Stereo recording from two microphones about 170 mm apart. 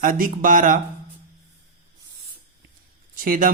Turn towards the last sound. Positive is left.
turn(degrees=-55)  # may be behind; listen again after turning